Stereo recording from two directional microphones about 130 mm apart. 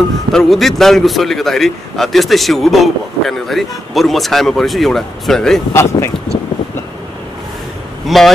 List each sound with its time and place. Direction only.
0.3 s a man's voice: centre (ahead or behind)
5.7 s speech: 20° left (ahead or behind)
8.1 s a man's voice: centre (ahead or behind)